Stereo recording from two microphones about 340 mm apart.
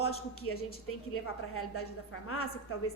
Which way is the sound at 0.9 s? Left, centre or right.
Left.